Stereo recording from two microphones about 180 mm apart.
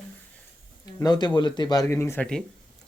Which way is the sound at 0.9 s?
25° left (ahead or behind).